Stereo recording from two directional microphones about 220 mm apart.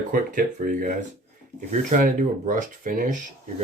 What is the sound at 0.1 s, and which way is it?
Speech, 40° right (ahead or behind).